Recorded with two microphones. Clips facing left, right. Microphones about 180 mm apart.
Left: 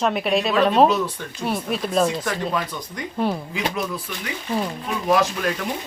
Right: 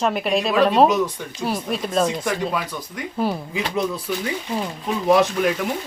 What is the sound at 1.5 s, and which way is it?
Speech, centre (ahead or behind).